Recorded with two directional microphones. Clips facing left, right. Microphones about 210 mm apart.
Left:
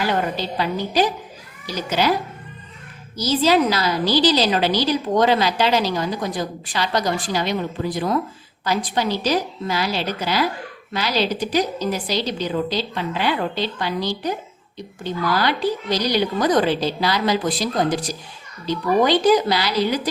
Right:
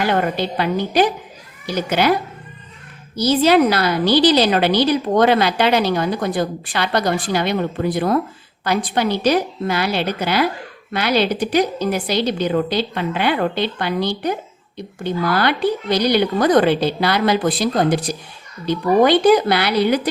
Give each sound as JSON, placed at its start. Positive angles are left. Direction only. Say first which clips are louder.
{"t": 0.0, "sound": "a woman's voice", "louder": "right 3 dB", "side_deg": -60}
{"t": 3.2, "sound": "a woman's voice", "louder": "right 4 dB", "side_deg": -60}